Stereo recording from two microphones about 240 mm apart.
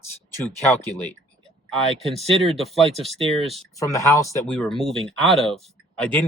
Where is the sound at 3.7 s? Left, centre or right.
Centre.